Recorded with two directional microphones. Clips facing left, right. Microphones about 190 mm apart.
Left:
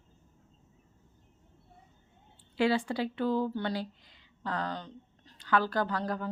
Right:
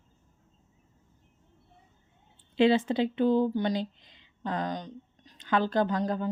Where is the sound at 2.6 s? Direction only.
20° right (ahead or behind).